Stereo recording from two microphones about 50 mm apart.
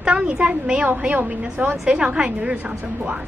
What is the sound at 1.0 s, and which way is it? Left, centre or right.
Speech, right.